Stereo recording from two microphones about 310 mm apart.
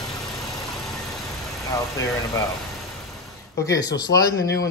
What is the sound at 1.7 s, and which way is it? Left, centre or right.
Speech, centre.